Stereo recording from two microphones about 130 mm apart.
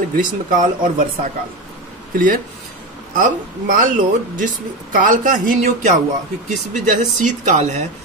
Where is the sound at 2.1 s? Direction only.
90° right.